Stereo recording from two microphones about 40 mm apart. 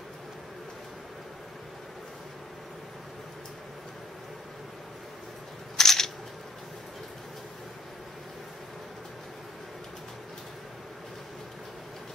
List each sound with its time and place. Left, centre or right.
5.8 s single-lens reflex camera: centre